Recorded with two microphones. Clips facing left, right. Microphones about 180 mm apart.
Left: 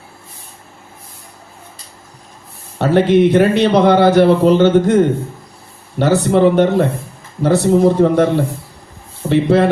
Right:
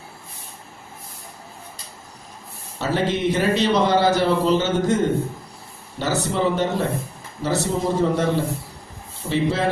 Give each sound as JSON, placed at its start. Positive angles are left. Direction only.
{"t": 2.7, "sound": "a man's voice", "side_deg": 60}
{"t": 6.0, "sound": "a man's voice", "side_deg": 60}
{"t": 9.3, "sound": "a man's voice", "side_deg": 60}